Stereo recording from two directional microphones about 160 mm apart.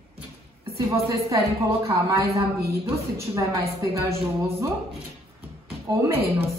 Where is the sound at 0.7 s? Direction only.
20° right (ahead or behind).